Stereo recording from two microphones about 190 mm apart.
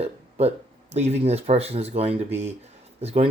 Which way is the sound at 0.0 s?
35° right (ahead or behind).